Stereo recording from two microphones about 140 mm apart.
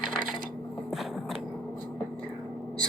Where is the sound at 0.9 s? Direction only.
Centre (ahead or behind).